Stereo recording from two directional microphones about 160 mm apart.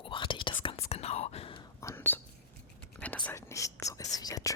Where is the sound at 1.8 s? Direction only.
15° left (ahead or behind).